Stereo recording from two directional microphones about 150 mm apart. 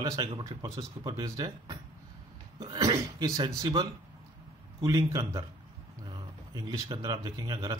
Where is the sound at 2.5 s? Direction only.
30° right (ahead or behind).